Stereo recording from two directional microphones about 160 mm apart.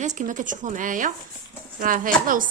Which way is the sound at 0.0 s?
50° right (ahead or behind).